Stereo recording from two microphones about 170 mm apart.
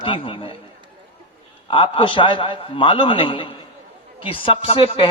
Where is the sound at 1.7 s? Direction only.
30° left (ahead or behind).